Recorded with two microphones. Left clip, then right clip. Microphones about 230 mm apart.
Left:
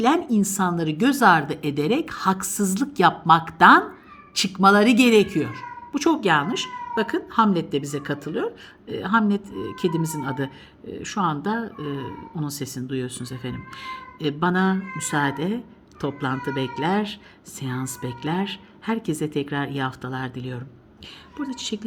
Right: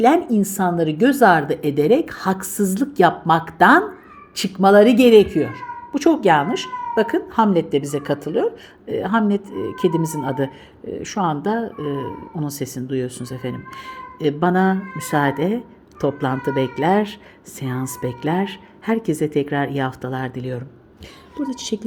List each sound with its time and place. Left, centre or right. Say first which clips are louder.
0.0 s speech: right 5 dB; left
11.9 s speech: right 6 dB; right
12.4 s speech: right 4 dB; centre